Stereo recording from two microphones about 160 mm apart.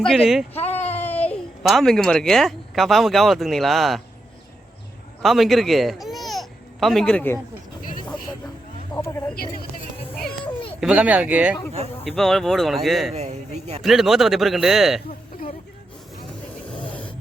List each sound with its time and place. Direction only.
0.0 s speech: centre (ahead or behind)
0.5 s a sound: 40° left (ahead or behind)
0.9 s a sound: 10° left (ahead or behind)
1.6 s speech: centre (ahead or behind)
5.2 s speech: centre (ahead or behind)
8.9 s speech: 30° left (ahead or behind)
10.4 s a sound: 35° left (ahead or behind)
10.8 s speech: 5° right (ahead or behind)
12.0 s speech: centre (ahead or behind)
13.1 s speech: 40° right (ahead or behind)
13.8 s speech: centre (ahead or behind)
16.8 s a sound: 10° left (ahead or behind)